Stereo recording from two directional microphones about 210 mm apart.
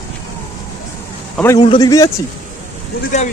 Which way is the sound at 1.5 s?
20° left (ahead or behind).